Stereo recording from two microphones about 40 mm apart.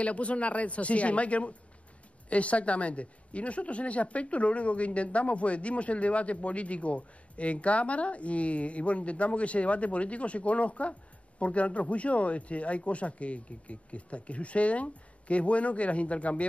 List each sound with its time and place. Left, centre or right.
0.0 s speech: left